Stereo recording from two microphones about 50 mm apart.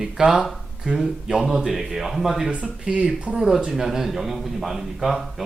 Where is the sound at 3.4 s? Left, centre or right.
Centre.